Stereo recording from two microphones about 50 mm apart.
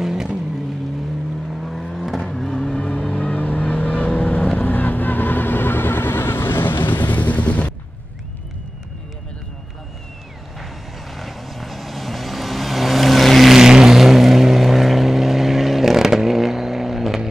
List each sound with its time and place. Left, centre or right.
0.0 s vehicle: centre
1.5 s vehicle: centre
3.2 s vehicle: left
4.6 s vehicle: left
10.6 s vehicle: centre